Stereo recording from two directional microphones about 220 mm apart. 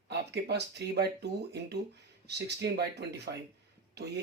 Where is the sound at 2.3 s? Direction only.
50° right (ahead or behind).